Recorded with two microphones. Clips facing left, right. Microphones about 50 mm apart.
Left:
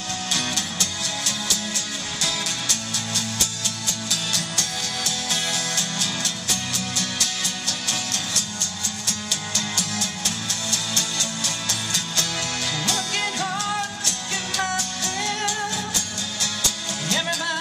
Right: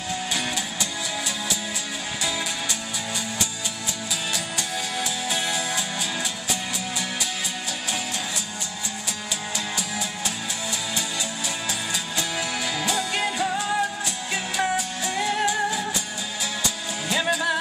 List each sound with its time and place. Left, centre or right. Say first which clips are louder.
0.3 s music: even; centre